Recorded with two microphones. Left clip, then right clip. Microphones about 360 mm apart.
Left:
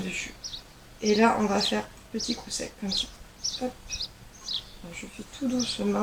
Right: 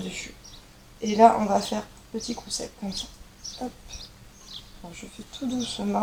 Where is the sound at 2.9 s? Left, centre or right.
Left.